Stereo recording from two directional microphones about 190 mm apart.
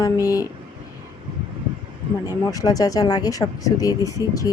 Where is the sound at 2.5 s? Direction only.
20° left (ahead or behind).